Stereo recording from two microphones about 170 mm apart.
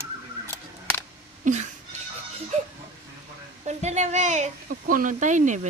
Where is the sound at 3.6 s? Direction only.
40° right (ahead or behind).